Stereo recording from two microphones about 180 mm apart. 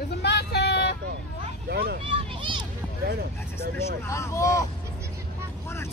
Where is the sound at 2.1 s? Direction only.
30° right (ahead or behind).